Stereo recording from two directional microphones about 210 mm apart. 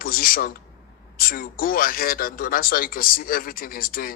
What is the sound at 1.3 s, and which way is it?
Speech, 45° left (ahead or behind).